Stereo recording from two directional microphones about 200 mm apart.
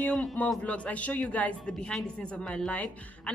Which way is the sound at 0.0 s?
5° left (ahead or behind).